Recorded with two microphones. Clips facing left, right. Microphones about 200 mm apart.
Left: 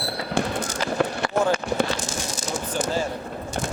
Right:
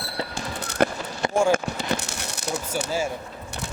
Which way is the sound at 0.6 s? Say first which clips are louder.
Right 6 dB; 65° right (ahead or behind).